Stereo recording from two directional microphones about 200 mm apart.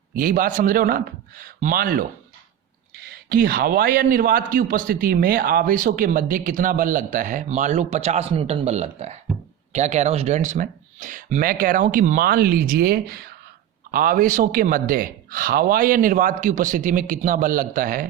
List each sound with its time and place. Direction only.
0.2 s a man's voice: 45° right (ahead or behind)